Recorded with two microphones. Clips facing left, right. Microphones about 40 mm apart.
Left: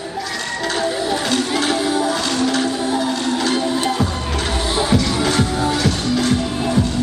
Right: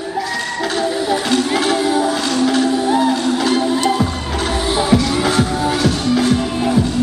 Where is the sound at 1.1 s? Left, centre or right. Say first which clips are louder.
Right 3 dB; centre.